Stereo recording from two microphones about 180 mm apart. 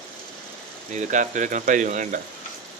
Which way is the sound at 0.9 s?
45° right (ahead or behind).